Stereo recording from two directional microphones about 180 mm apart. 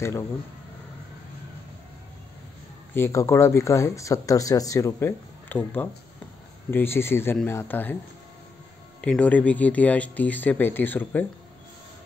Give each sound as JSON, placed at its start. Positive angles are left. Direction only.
{"t": 2.9, "sound": "speech", "side_deg": 15}
{"t": 9.0, "sound": "speech", "side_deg": 5}